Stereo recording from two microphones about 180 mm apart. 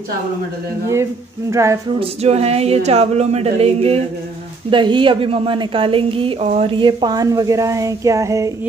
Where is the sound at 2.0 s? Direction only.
35° right (ahead or behind).